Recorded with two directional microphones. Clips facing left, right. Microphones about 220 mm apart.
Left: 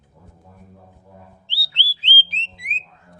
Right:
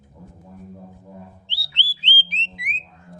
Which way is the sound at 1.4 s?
15° right (ahead or behind).